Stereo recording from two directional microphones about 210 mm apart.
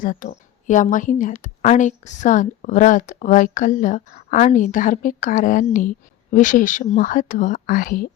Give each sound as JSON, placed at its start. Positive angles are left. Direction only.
{"t": 0.0, "sound": "a woman's voice", "side_deg": 40}